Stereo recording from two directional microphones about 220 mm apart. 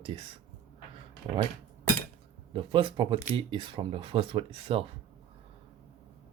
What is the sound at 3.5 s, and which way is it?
Speech, 25° right (ahead or behind).